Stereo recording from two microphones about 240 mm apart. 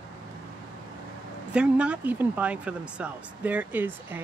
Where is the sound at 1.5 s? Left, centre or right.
Centre.